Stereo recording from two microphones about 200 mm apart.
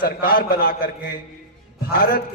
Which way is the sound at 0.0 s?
45° left (ahead or behind).